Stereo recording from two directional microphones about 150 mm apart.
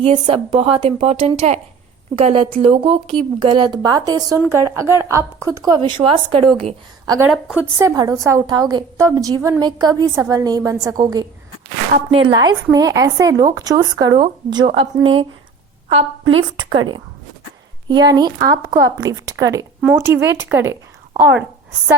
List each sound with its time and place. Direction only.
0.0 s a woman's voice: 35° right (ahead or behind)
6.4 s a woman's voice: 5° left (ahead or behind)
7.0 s a woman's voice: 15° right (ahead or behind)
7.3 s a woman's voice: centre (ahead or behind)
7.6 s a woman's voice: 20° right (ahead or behind)